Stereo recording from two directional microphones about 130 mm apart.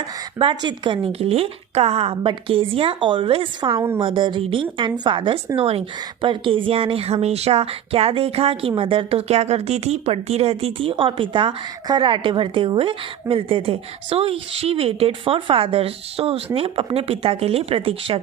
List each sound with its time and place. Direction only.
0.3 s speech: 40° right (ahead or behind)
5.5 s speech: 50° right (ahead or behind)